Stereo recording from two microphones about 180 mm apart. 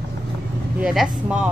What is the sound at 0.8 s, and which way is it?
Speech, 5° right (ahead or behind).